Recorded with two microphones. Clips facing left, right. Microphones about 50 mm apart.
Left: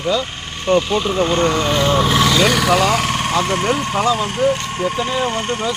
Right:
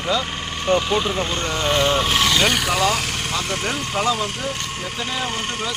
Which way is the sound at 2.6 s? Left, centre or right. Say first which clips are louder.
Left 6 dB; left.